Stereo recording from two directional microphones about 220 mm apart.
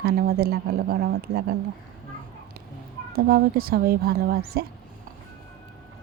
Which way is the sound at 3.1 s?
45° right (ahead or behind).